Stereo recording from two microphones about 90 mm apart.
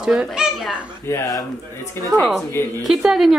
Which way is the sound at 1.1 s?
30° left (ahead or behind).